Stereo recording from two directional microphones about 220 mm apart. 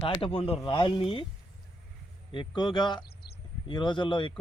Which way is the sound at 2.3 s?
20° left (ahead or behind).